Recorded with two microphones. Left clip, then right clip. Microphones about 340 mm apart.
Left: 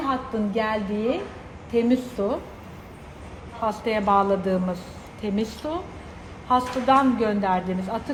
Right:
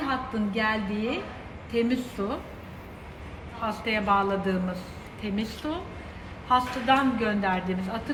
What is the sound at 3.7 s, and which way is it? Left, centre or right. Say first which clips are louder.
Speech: left 3 dB; left.